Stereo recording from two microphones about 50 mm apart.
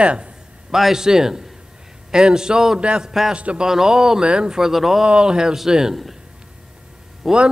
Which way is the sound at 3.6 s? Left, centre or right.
Centre.